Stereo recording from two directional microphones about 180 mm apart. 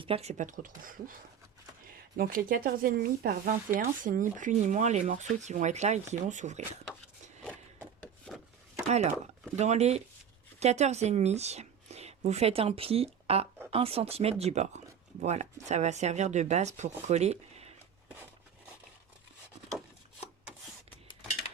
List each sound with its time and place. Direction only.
0.0 s speech: 35° right (ahead or behind)
8.9 s a woman's voice: 40° right (ahead or behind)